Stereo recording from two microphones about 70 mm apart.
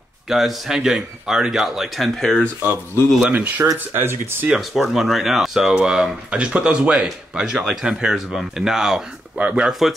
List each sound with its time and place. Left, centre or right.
0.3 s a man's voice: centre
3.3 s speech: right
4.6 s speech: centre
9.4 s speech: right
9.7 s a man's voice: centre